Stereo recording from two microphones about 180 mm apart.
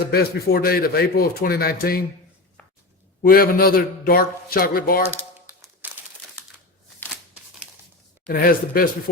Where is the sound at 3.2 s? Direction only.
55° left (ahead or behind).